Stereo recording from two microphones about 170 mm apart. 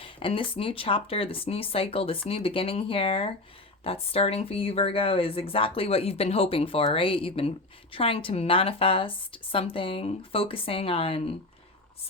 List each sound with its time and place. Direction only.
0.0 s speech: 30° left (ahead or behind)